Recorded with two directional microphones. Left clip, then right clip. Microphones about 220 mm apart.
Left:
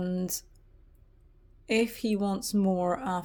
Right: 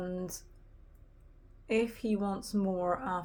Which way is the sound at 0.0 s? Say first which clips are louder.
Left 4 dB; 50° left (ahead or behind).